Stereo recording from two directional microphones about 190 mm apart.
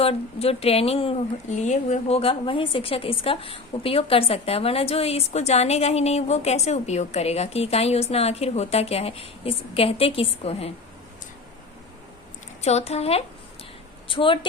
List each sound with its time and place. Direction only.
0.0 s speech: 30° left (ahead or behind)
12.6 s a woman's voice: 35° left (ahead or behind)